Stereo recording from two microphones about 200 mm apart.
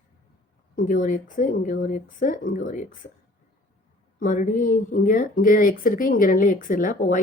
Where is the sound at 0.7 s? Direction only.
40° left (ahead or behind).